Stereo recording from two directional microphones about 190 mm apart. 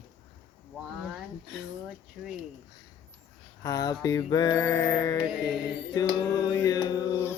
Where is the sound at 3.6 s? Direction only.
20° left (ahead or behind).